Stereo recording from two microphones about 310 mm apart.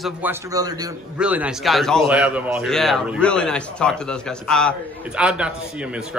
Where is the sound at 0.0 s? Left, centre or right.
Centre.